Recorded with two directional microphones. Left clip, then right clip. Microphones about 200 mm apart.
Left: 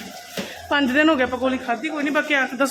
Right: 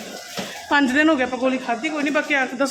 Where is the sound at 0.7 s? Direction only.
10° left (ahead or behind).